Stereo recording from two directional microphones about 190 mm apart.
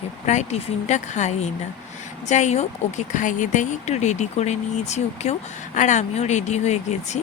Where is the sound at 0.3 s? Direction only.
35° left (ahead or behind).